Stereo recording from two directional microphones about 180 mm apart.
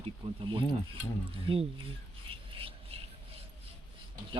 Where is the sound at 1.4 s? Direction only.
30° right (ahead or behind).